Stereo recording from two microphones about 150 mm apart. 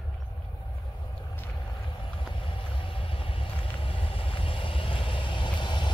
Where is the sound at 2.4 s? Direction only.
35° left (ahead or behind).